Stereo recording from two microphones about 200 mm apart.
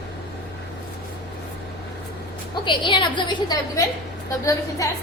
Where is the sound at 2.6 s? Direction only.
25° left (ahead or behind).